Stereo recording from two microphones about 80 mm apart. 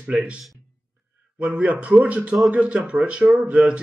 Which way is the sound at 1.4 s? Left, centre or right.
Centre.